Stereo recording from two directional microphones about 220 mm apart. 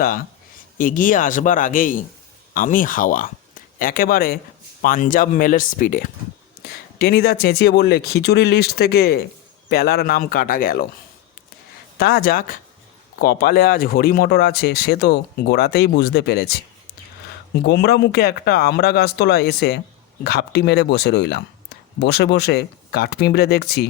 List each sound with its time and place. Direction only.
0.8 s speech: 35° left (ahead or behind)
11.9 s speech: 45° left (ahead or behind)
17.5 s speech: 45° left (ahead or behind)